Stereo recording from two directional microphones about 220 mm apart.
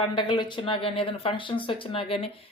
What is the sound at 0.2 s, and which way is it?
Speech, 20° left (ahead or behind).